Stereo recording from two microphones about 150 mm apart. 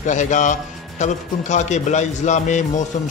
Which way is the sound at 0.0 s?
55° left (ahead or behind).